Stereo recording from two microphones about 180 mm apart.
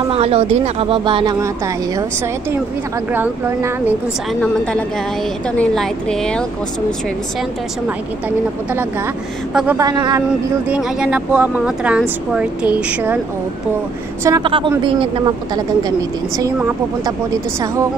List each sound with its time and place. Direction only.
0.1 s speech: 35° right (ahead or behind)
3.1 s speech: 15° right (ahead or behind)
5.6 s speech: 5° left (ahead or behind)
9.5 s speech: 5° right (ahead or behind)
9.8 s speech: 20° right (ahead or behind)
10.7 s speech: 5° right (ahead or behind)
14.2 s speech: 25° right (ahead or behind)
17.0 s speech: 20° right (ahead or behind)